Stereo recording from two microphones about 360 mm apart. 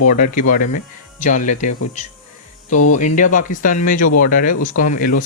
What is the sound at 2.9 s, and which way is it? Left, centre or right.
Speech, left.